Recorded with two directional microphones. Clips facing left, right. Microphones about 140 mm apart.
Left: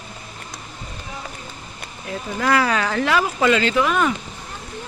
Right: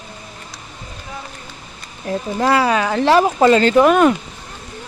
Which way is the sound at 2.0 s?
25° right (ahead or behind).